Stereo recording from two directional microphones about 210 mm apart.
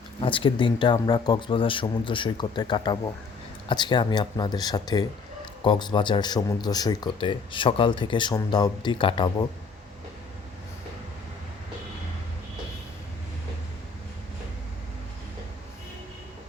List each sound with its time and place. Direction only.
0.2 s speech: 25° left (ahead or behind)